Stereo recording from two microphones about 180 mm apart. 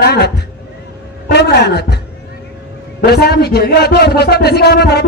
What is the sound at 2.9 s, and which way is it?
A woman's voice, 60° left (ahead or behind).